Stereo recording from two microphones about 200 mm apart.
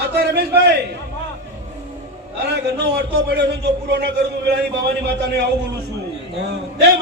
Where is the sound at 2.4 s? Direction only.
55° right (ahead or behind).